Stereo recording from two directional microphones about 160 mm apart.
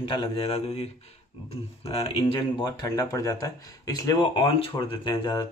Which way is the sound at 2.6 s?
20° left (ahead or behind).